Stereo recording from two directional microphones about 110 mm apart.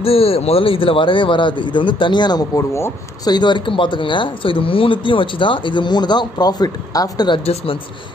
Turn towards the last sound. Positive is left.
turn(degrees=55)  # may be behind; listen again after turning